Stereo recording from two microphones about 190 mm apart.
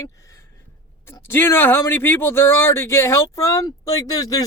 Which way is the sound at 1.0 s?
10° left (ahead or behind).